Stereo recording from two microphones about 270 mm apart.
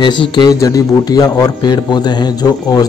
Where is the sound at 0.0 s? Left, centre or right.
Centre.